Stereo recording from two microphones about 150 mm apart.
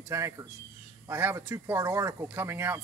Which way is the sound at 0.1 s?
20° right (ahead or behind).